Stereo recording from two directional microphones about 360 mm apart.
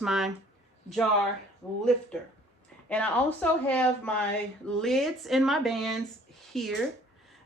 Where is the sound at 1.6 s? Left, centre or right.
Centre.